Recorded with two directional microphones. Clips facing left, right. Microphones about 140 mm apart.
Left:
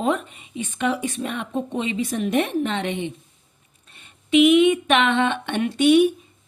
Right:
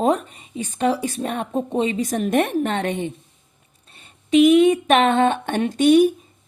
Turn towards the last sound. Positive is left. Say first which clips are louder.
# right 2 dB
turn(degrees=-40)  # may be behind; listen again after turning